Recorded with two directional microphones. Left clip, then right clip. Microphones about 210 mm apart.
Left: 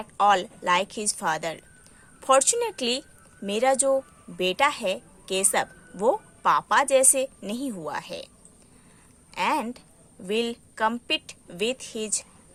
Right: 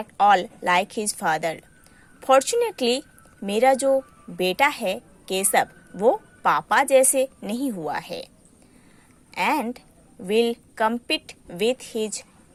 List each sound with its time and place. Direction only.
0.0 s a woman's voice: 15° right (ahead or behind)
9.3 s a woman's voice: 15° right (ahead or behind)